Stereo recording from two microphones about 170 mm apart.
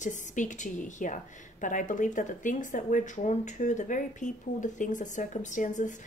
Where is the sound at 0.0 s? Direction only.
45° left (ahead or behind).